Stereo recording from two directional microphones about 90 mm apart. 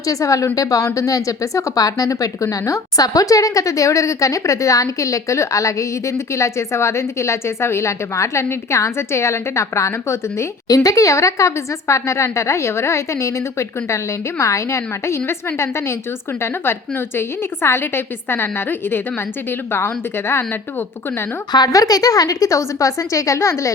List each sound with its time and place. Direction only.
0.0 s a woman's voice: 40° left (ahead or behind)
21.5 s a woman's voice: 45° left (ahead or behind)